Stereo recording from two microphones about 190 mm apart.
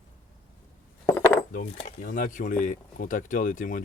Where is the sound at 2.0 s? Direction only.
45° left (ahead or behind).